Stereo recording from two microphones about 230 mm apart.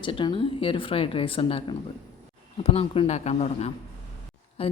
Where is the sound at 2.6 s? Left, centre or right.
Left.